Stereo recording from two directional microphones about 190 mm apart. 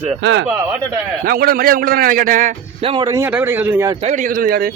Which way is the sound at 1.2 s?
50° right (ahead or behind).